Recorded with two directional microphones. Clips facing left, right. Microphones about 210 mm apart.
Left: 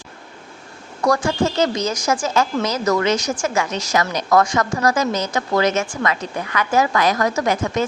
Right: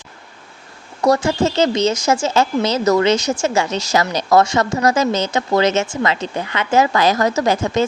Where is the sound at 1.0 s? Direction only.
25° right (ahead or behind).